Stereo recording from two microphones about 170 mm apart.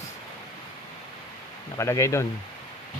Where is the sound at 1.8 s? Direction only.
15° left (ahead or behind).